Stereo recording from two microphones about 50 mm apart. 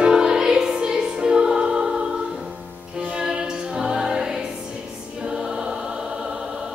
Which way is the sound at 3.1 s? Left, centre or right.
Centre.